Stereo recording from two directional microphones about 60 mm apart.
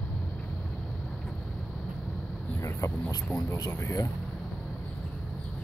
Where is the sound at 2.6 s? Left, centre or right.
Left.